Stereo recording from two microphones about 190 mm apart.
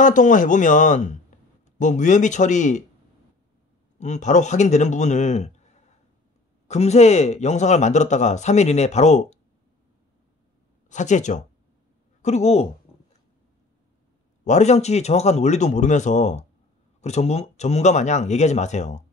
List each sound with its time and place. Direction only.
0.0 s speech: 40° left (ahead or behind)
4.0 s speech: 40° left (ahead or behind)
6.7 s speech: 35° left (ahead or behind)
10.9 s speech: 40° left (ahead or behind)
14.4 s speech: 35° left (ahead or behind)